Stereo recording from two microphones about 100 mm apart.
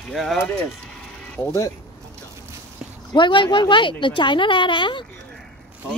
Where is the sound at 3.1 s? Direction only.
55° left (ahead or behind).